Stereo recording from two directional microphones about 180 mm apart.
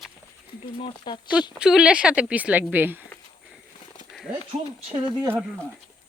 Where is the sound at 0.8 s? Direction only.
25° left (ahead or behind).